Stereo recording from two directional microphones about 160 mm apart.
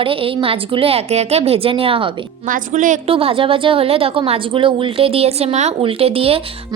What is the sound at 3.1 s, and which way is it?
A woman's voice, 35° right (ahead or behind).